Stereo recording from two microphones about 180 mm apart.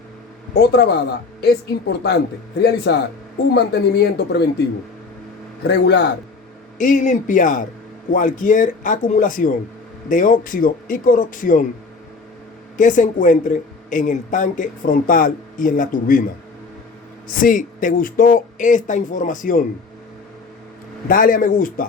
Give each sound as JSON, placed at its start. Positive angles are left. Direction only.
{"t": 0.5, "sound": "speech", "side_deg": 65}
{"t": 2.6, "sound": "speech", "side_deg": 70}
{"t": 5.6, "sound": "speech", "side_deg": 70}
{"t": 6.7, "sound": "speech", "side_deg": 45}
{"t": 12.7, "sound": "speech", "side_deg": 45}
{"t": 17.2, "sound": "speech", "side_deg": 50}
{"t": 21.1, "sound": "speech", "side_deg": 50}